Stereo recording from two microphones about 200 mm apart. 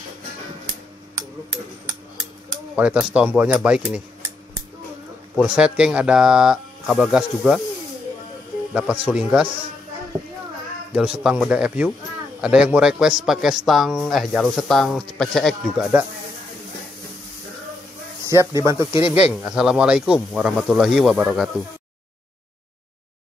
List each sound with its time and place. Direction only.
2.7 s a man's voice: 5° right (ahead or behind)
5.3 s a man's voice: centre (ahead or behind)
8.7 s a man's voice: 5° right (ahead or behind)
10.9 s a man's voice: 5° right (ahead or behind)
18.3 s speech: 15° right (ahead or behind)
18.9 s speech: 25° left (ahead or behind)
19.2 s a man's voice: 5° right (ahead or behind)